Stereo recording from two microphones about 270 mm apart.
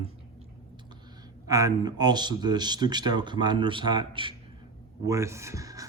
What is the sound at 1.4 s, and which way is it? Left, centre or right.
Speech, centre.